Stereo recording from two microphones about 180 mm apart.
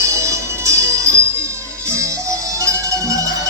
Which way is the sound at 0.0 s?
15° right (ahead or behind).